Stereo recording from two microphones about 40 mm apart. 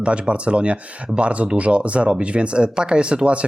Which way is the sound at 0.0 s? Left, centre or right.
Right.